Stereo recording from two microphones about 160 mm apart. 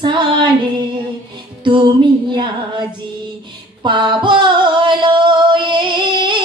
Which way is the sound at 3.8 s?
30° right (ahead or behind).